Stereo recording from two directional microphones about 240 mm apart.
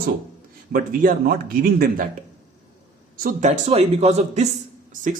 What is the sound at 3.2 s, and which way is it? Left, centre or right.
Speech, right.